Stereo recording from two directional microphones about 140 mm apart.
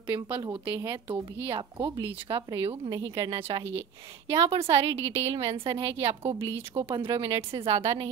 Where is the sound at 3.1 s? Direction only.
40° right (ahead or behind).